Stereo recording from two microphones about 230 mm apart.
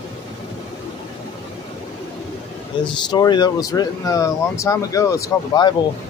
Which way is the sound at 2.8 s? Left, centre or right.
Centre.